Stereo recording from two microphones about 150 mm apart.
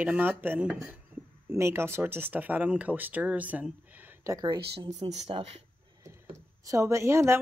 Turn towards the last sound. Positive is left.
turn(degrees=-20)  # may be behind; listen again after turning